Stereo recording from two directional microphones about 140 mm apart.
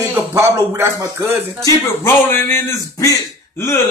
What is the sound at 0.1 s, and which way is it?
Speech, 15° right (ahead or behind).